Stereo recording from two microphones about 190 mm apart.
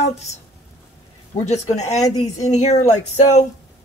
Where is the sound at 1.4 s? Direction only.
35° left (ahead or behind).